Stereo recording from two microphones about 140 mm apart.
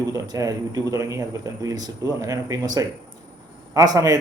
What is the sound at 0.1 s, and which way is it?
A man's voice, 25° right (ahead or behind).